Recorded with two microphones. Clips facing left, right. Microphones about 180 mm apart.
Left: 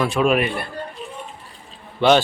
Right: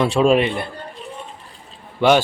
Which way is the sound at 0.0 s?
30° right (ahead or behind).